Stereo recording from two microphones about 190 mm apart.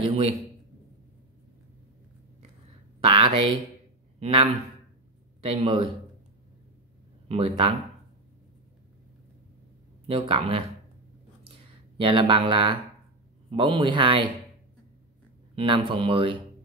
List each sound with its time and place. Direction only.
0.0 s a man's voice: 35° right (ahead or behind)
3.0 s a man's voice: 30° right (ahead or behind)
7.2 s speech: 30° right (ahead or behind)
10.0 s speech: 30° right (ahead or behind)
12.0 s speech: 25° right (ahead or behind)
15.5 s speech: 25° right (ahead or behind)